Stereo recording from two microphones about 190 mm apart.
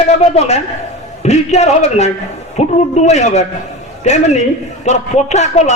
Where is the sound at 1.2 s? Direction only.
35° left (ahead or behind).